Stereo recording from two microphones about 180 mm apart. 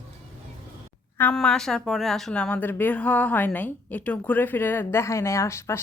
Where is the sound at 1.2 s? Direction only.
5° left (ahead or behind).